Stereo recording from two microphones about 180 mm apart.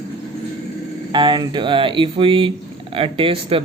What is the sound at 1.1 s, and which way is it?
A man's voice, 25° right (ahead or behind).